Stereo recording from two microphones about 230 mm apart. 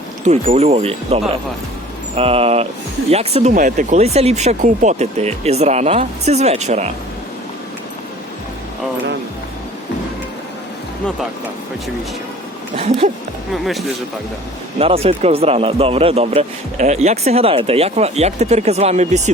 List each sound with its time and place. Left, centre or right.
0.3 s speech: right
12.7 s speech: right
13.5 s speech: centre
14.8 s speech: right